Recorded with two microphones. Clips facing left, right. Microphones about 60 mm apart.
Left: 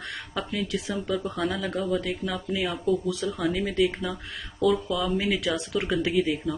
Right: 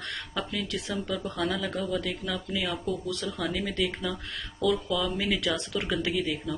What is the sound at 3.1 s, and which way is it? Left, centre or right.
Speech, centre.